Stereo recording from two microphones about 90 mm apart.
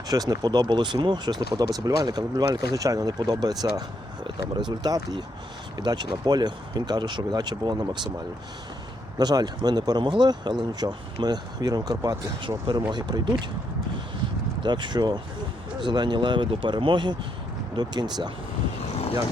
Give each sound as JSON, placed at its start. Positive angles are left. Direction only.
{"t": 0.1, "sound": "speech", "side_deg": -45}
{"t": 9.1, "sound": "speech", "side_deg": -45}
{"t": 12.4, "sound": "speech", "side_deg": -60}
{"t": 14.6, "sound": "speech", "side_deg": -60}